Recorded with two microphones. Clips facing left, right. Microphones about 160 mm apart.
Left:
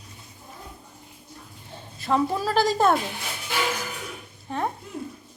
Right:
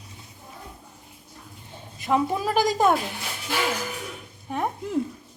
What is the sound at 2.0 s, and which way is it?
A woman's voice, 15° right (ahead or behind).